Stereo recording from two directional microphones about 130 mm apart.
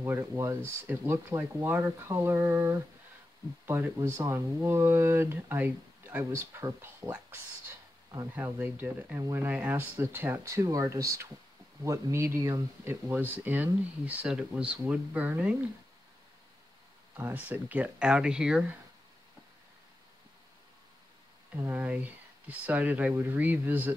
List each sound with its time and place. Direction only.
0.0 s speech: 20° right (ahead or behind)
8.5 s speech: 15° right (ahead or behind)
17.2 s speech: 10° right (ahead or behind)
21.5 s speech: 15° right (ahead or behind)